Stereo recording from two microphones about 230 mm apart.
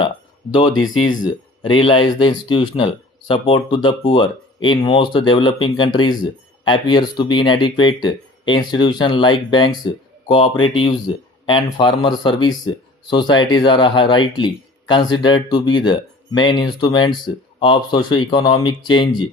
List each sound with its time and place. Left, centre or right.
0.7 s speech: left
1.2 s speech: left